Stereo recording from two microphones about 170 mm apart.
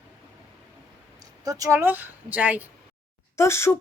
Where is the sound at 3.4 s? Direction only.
15° left (ahead or behind).